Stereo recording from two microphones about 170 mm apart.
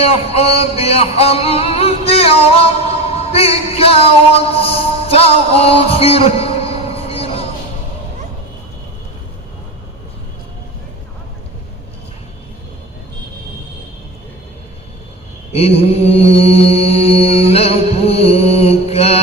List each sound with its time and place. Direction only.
0.0 s music: 35° left (ahead or behind)
15.5 s mantra: 35° left (ahead or behind)